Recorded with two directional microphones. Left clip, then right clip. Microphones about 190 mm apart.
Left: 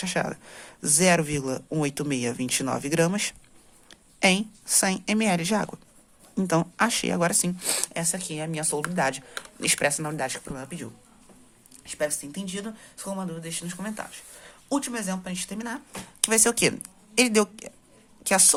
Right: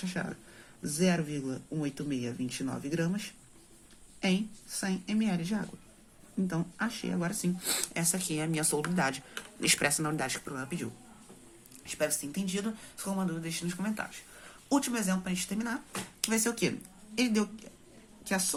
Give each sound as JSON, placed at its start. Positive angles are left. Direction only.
{"t": 0.0, "sound": "a man's voice", "side_deg": 45}
{"t": 11.9, "sound": "speech", "side_deg": 20}
{"t": 16.2, "sound": "a man's voice", "side_deg": 40}